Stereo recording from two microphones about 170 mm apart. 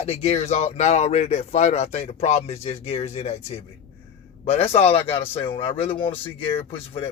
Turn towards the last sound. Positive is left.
turn(degrees=35)  # may be behind; listen again after turning